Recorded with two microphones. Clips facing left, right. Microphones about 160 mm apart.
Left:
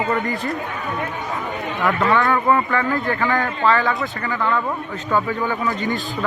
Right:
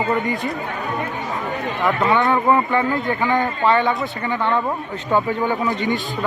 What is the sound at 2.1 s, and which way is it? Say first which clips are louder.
Speech: right 2 dB; 20° right (ahead or behind).